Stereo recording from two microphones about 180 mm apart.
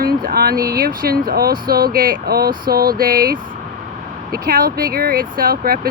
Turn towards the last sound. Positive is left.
turn(degrees=-55)  # may be behind; listen again after turning